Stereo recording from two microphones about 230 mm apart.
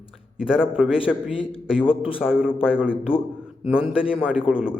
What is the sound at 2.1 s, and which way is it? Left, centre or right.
Speech, centre.